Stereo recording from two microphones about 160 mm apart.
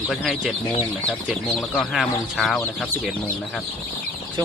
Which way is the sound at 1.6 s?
5° left (ahead or behind).